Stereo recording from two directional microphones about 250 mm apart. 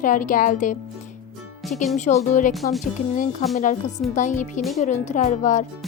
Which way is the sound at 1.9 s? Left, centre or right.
Left.